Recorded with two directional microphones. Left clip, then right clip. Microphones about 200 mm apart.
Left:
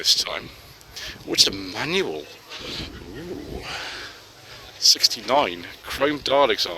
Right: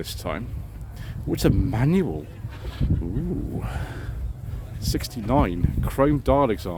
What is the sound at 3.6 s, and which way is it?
Speech, 20° right (ahead or behind).